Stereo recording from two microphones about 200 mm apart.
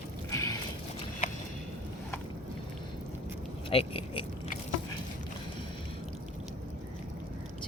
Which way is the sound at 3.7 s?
30° left (ahead or behind).